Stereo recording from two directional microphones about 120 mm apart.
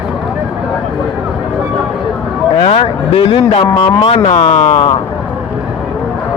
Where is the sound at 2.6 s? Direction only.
50° left (ahead or behind).